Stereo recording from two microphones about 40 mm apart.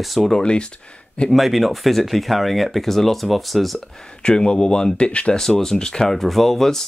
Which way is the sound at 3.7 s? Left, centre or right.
Left.